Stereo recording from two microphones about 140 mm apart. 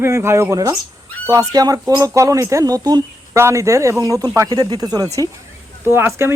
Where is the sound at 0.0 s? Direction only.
20° right (ahead or behind).